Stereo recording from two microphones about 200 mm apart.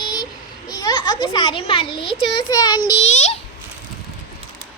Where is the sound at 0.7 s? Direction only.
20° left (ahead or behind).